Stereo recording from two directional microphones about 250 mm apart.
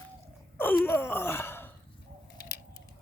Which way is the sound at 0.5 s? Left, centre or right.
Centre.